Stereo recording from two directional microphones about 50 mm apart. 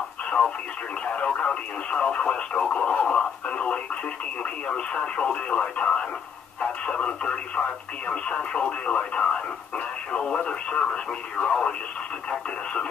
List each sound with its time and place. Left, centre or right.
1.0 s speech: left